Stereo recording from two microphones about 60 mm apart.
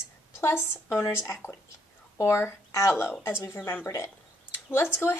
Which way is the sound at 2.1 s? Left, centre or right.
Left.